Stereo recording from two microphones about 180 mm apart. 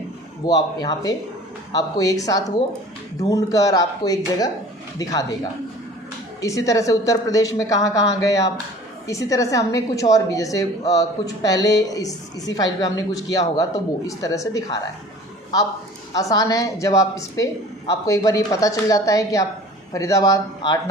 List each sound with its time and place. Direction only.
0.4 s speech: 20° left (ahead or behind)
6.4 s speech: 20° left (ahead or behind)
16.1 s speech: 20° left (ahead or behind)